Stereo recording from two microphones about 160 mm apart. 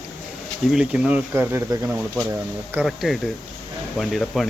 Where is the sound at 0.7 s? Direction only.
5° right (ahead or behind).